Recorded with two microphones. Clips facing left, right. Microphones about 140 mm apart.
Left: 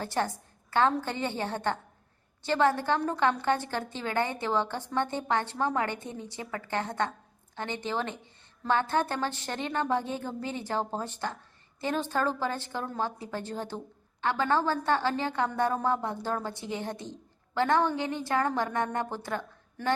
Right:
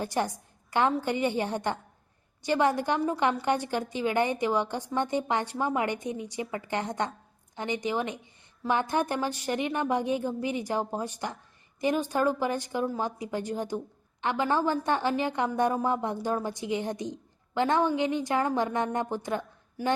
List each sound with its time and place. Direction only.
0.0 s a woman's voice: 15° right (ahead or behind)